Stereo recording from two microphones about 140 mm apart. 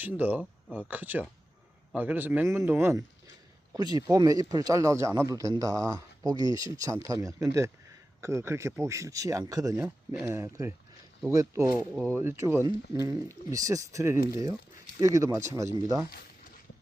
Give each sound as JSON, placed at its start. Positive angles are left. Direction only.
{"t": 0.0, "sound": "speech", "side_deg": -10}
{"t": 3.7, "sound": "speech", "side_deg": -30}